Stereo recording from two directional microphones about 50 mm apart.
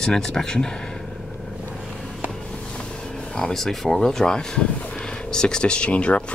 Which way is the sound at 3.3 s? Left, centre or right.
Centre.